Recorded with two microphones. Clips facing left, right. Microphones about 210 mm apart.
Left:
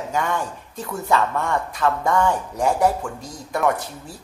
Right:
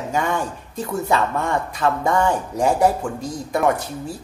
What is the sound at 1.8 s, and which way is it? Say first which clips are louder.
Speech: right 1 dB; 20° right (ahead or behind).